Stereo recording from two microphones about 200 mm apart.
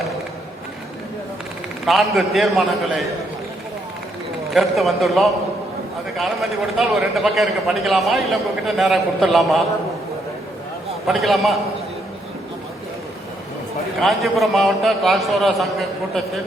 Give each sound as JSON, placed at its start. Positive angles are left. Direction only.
{"t": 1.8, "sound": "a man's voice", "side_deg": 0}
{"t": 4.5, "sound": "a man's voice", "side_deg": 0}
{"t": 11.0, "sound": "a man's voice", "side_deg": 0}
{"t": 14.0, "sound": "a man's voice", "side_deg": 0}